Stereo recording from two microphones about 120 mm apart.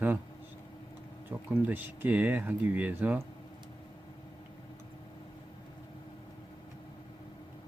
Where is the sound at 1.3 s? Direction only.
20° right (ahead or behind).